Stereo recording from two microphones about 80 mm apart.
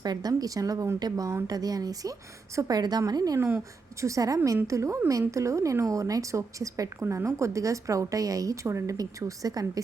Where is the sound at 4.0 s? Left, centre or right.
Right.